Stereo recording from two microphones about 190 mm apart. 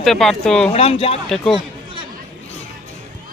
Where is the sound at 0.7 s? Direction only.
30° left (ahead or behind).